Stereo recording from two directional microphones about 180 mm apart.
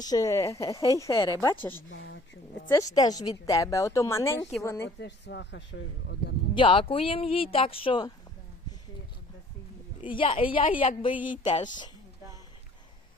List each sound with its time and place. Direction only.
0.0 s a woman's voice: 20° left (ahead or behind)
1.9 s a sound: 80° left
2.7 s a woman's voice: 20° left (ahead or behind)
4.9 s speech: 75° left (ahead or behind)
6.5 s speech: 30° left (ahead or behind)
10.1 s speech: 30° left (ahead or behind)